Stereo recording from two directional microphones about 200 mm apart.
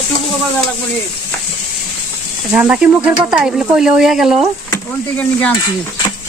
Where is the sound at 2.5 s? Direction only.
5° right (ahead or behind).